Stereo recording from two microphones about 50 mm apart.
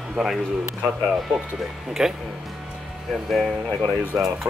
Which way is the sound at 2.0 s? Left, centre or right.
Centre.